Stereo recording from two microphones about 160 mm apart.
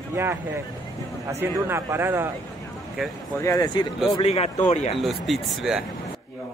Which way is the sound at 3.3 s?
20° left (ahead or behind).